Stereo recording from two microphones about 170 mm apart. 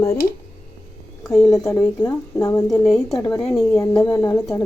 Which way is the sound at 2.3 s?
20° left (ahead or behind).